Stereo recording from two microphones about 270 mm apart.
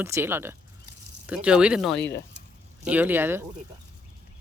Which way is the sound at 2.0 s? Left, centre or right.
Left.